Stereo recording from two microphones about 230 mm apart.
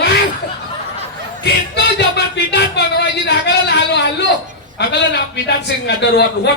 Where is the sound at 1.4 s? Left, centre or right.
Left.